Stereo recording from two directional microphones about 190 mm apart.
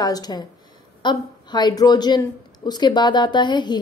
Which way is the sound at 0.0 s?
20° left (ahead or behind).